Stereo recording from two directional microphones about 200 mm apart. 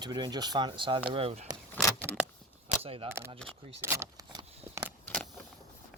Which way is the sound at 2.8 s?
30° right (ahead or behind).